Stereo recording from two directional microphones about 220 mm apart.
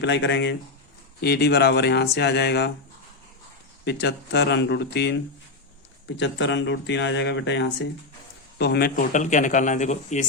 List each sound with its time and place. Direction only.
0.0 s speech: 50° left (ahead or behind)
3.8 s speech: 50° left (ahead or behind)
6.1 s speech: 55° left (ahead or behind); by 10.2 s 30° left (ahead or behind)